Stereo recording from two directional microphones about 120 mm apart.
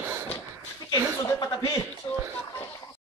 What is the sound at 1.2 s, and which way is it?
Speech, 20° left (ahead or behind).